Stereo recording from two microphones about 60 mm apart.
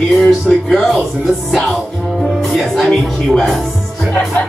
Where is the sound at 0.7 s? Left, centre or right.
Centre.